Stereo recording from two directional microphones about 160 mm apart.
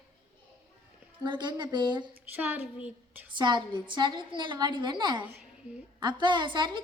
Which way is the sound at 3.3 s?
30° right (ahead or behind).